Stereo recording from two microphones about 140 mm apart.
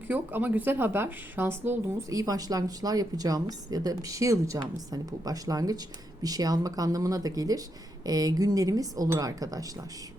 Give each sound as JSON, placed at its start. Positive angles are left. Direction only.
{"t": 0.1, "sound": "a woman's voice", "side_deg": -10}